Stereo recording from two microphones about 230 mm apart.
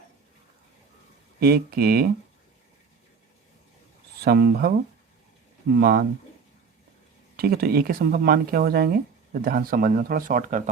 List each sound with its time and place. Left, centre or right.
1.4 s speech: right
4.2 s speech: right
5.8 s speech: right
7.3 s speech: right